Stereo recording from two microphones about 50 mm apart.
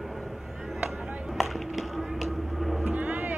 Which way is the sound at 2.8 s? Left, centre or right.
Right.